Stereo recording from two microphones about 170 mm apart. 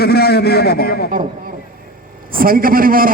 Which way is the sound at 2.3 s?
60° right (ahead or behind).